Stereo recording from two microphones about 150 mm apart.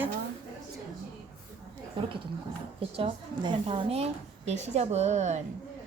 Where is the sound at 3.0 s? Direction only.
35° right (ahead or behind).